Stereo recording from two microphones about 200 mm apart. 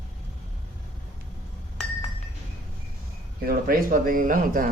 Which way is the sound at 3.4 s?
45° right (ahead or behind).